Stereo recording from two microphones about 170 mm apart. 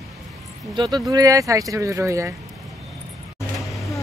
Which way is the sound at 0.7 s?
25° right (ahead or behind).